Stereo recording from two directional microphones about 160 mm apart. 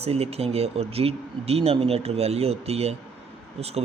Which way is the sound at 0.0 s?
40° right (ahead or behind).